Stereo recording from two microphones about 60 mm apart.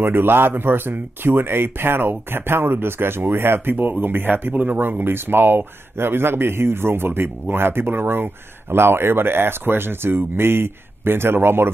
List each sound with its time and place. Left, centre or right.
0.0 s speech: right